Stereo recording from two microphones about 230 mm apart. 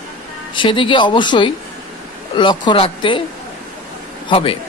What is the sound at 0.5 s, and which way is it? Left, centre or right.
Speech, left.